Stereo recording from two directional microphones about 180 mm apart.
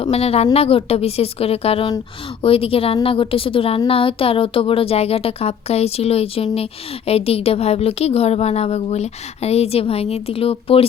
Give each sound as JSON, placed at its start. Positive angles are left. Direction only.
{"t": 0.0, "sound": "a woman's voice", "side_deg": 35}